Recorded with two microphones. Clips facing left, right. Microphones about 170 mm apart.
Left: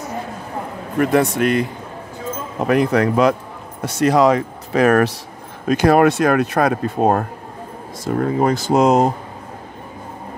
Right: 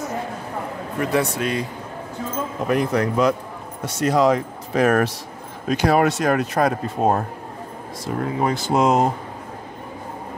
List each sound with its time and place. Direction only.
0.9 s speech: 60° left (ahead or behind)
2.6 s speech: 70° left (ahead or behind)
5.7 s speech: 50° left (ahead or behind)
8.0 s speech: 40° left (ahead or behind)